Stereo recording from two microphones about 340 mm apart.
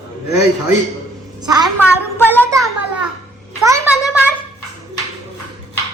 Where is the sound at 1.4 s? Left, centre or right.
Centre.